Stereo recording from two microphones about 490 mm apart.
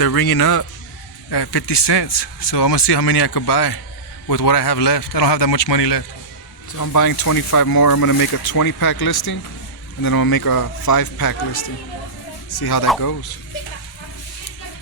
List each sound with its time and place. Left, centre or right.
0.0 s speech: left
6.7 s speech: left